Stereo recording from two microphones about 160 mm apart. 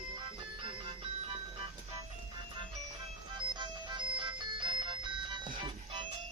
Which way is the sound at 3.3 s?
30° right (ahead or behind).